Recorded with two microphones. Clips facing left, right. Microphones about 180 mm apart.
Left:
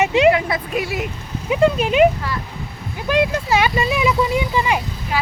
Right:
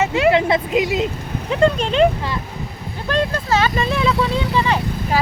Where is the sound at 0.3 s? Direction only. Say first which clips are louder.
Right 1 dB; 25° right (ahead or behind).